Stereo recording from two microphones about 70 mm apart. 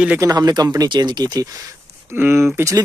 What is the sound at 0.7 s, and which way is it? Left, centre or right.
Speech, right.